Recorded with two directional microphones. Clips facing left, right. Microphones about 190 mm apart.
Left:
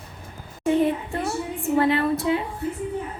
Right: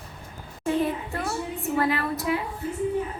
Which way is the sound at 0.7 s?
20° left (ahead or behind).